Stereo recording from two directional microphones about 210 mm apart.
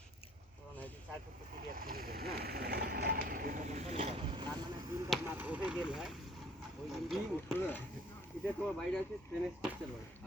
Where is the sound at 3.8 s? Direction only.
30° right (ahead or behind).